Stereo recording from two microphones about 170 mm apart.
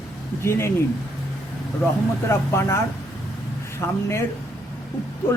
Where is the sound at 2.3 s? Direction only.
15° left (ahead or behind).